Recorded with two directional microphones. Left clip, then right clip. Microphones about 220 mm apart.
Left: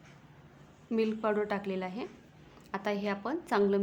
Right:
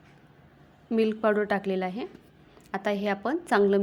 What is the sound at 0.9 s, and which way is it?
A woman's voice, 20° right (ahead or behind).